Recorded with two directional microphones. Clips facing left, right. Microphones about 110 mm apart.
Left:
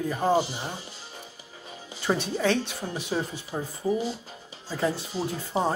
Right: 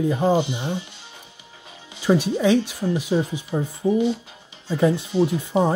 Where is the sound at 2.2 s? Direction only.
10° right (ahead or behind).